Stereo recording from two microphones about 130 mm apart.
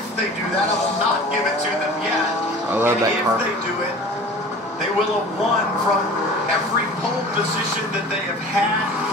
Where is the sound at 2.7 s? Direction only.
15° right (ahead or behind).